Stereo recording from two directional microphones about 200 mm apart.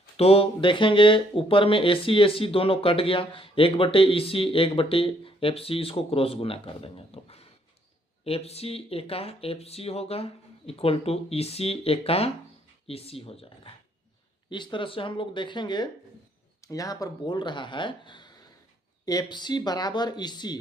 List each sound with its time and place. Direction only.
0.2 s speech: 30° left (ahead or behind)